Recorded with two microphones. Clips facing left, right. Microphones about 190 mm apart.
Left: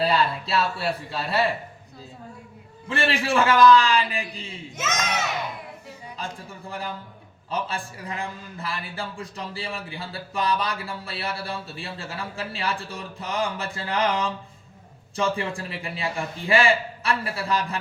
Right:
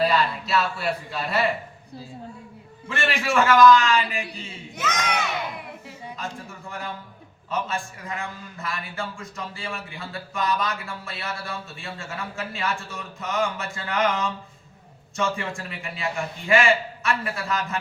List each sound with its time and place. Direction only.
0.0 s a man's voice: 30° left (ahead or behind)
2.9 s a man's voice: 30° left (ahead or behind)
6.2 s a man's voice: 30° left (ahead or behind)
7.5 s a man's voice: 30° left (ahead or behind)